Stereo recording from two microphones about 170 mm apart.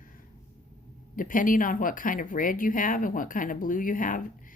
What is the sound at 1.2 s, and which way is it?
Speech, 55° left (ahead or behind).